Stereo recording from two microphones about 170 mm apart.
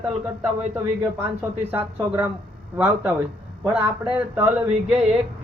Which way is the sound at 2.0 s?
5° right (ahead or behind).